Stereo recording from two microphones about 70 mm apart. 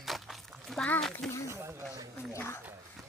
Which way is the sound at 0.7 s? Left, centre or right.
Left.